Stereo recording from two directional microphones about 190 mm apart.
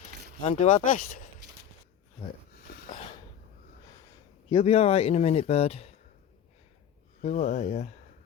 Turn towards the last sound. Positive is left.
turn(degrees=35)  # may be behind; listen again after turning